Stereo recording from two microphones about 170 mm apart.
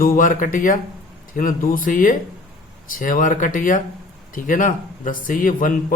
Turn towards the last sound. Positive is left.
turn(degrees=50)  # may be behind; listen again after turning